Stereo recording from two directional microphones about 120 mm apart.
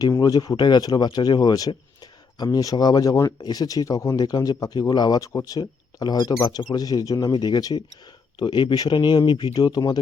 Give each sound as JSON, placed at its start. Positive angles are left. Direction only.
{"t": 0.0, "sound": "speech", "side_deg": 30}